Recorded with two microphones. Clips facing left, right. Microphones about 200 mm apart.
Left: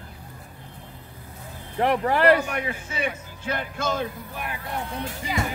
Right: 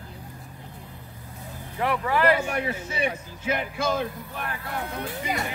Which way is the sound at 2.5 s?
35° right (ahead or behind).